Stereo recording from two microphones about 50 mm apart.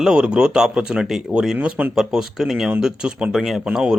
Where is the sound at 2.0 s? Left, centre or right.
Centre.